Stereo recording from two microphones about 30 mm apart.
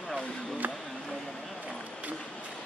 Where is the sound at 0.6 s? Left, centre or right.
Right.